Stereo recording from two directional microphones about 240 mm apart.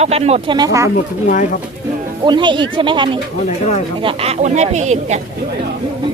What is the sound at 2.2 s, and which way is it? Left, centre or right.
Speech, centre.